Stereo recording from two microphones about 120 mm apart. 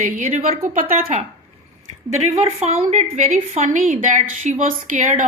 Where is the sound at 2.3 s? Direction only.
60° right (ahead or behind).